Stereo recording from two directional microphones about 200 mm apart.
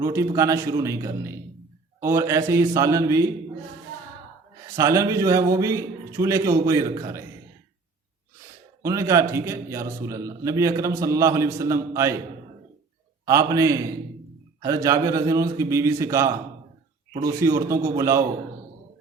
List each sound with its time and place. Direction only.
0.0 s a man's voice: 15° right (ahead or behind)
4.8 s a man's voice: 15° right (ahead or behind)
8.8 s a man's voice: 15° right (ahead or behind)
13.2 s a man's voice: 15° right (ahead or behind)
17.4 s a man's voice: 15° right (ahead or behind)